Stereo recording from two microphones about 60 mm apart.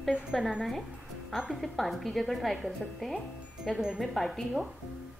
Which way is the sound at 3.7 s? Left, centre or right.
Centre.